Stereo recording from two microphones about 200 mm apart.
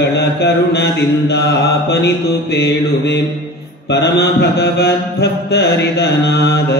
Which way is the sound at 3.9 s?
55° left (ahead or behind).